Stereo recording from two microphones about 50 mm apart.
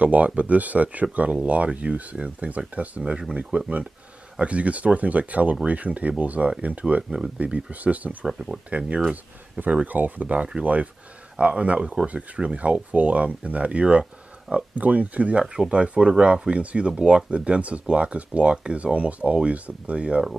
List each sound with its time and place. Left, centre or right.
0.0 s speech: right
3.0 s speech: centre
15.4 s speech: centre
15.7 s speech: right